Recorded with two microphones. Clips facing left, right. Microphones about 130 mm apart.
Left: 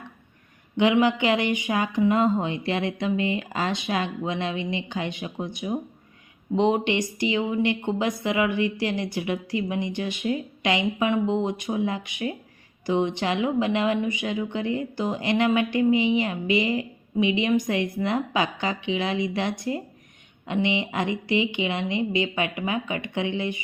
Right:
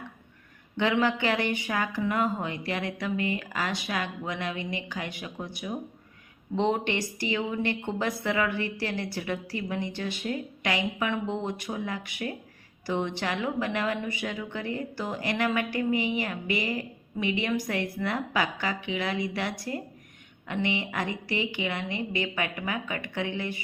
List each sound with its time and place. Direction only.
0.8 s a woman's voice: 15° left (ahead or behind)